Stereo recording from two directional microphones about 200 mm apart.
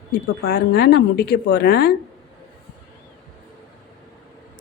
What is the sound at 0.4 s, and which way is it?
Speech, 50° left (ahead or behind).